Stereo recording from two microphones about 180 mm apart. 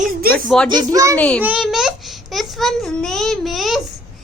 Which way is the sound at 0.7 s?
20° right (ahead or behind).